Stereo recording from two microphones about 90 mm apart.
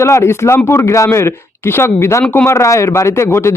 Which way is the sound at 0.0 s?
30° left (ahead or behind).